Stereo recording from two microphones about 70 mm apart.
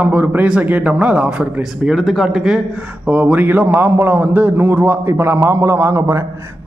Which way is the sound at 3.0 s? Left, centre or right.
Right.